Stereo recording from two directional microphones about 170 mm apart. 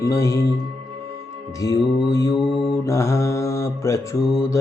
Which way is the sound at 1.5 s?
20° left (ahead or behind).